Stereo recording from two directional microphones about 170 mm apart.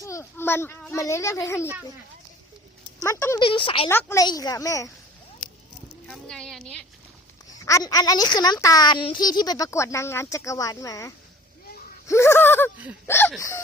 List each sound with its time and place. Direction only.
0.0 s a child's voice: 15° left (ahead or behind)
3.0 s a child's voice: 15° left (ahead or behind)
3.4 s a woman's voice: 30° left (ahead or behind)
3.8 s a woman's voice: 15° left (ahead or behind)
6.1 s a woman's voice: 5° left (ahead or behind)
7.6 s a woman's voice: 20° left (ahead or behind)
12.7 s speech: 10° right (ahead or behind)
13.1 s a child's voice: 15° left (ahead or behind)